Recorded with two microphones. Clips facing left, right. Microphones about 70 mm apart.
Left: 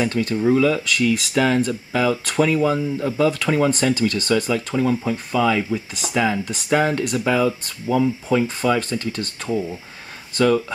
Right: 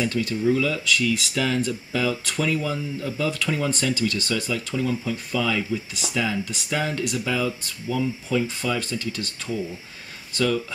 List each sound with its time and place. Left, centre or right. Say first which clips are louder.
0.0 s speech: left 3 dB; left